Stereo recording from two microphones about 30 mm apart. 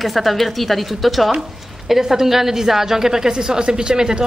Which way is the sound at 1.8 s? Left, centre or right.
Centre.